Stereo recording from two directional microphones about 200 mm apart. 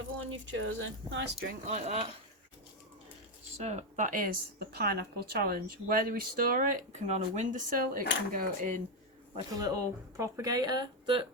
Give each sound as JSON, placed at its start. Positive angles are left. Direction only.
{"t": 0.3, "sound": "speech", "side_deg": -70}
{"t": 1.7, "sound": "speech", "side_deg": -30}
{"t": 3.6, "sound": "a woman's voice", "side_deg": -35}
{"t": 9.3, "sound": "speech", "side_deg": -20}